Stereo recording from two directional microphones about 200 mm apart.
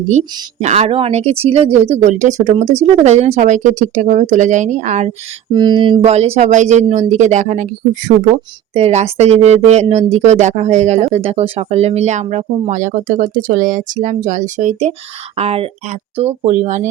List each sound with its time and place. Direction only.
0.1 s speech: 35° right (ahead or behind)
5.5 s speech: 20° right (ahead or behind); by 16.9 s 35° right (ahead or behind)